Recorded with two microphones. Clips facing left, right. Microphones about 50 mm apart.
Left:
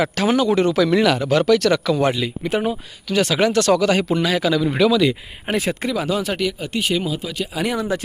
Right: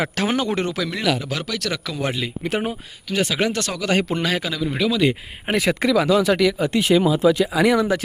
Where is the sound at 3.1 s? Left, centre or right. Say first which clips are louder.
Left 3 dB; centre.